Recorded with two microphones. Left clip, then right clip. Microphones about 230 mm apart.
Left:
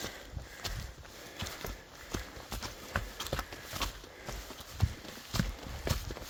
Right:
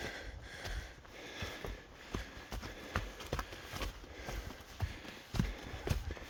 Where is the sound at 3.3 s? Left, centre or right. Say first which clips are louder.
Left 3 dB; centre.